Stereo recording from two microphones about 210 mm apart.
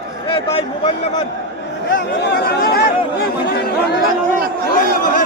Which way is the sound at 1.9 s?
55° left (ahead or behind).